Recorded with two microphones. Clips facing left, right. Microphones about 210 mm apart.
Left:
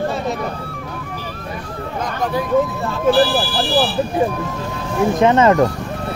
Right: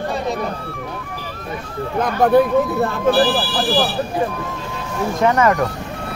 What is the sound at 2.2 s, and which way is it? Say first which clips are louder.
Speech: right 4 dB; 60° right (ahead or behind).